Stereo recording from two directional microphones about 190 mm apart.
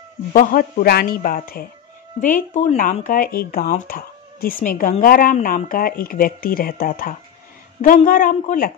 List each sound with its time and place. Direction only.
0.3 s speech: 45° left (ahead or behind)
2.3 s speech: 35° left (ahead or behind)